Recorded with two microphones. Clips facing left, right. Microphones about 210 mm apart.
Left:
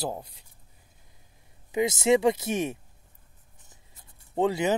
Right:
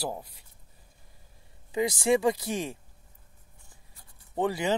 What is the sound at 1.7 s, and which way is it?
Speech, 20° left (ahead or behind).